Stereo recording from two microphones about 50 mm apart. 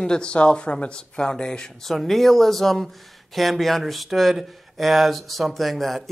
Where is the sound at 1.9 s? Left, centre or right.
Centre.